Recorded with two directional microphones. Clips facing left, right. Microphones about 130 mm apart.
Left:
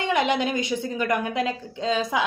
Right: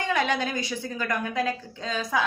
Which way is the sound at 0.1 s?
20° left (ahead or behind).